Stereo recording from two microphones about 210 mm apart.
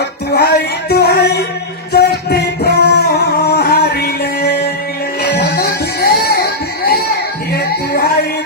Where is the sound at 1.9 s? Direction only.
50° left (ahead or behind).